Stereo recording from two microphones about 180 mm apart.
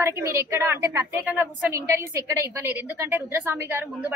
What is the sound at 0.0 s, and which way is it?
A woman's voice, 15° right (ahead or behind).